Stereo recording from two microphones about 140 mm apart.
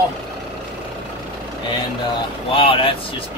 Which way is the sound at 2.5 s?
40° left (ahead or behind).